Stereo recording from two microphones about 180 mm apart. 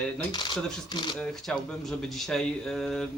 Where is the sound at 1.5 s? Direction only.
5° left (ahead or behind).